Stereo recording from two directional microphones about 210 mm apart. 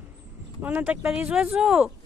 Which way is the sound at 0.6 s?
10° right (ahead or behind).